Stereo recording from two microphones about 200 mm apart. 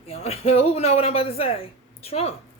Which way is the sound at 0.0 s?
30° left (ahead or behind).